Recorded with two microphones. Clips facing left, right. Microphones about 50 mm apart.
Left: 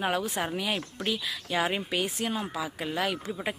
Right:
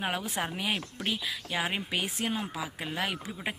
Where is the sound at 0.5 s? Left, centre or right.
Right.